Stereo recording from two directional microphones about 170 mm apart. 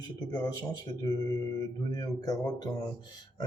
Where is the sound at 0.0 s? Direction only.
25° left (ahead or behind).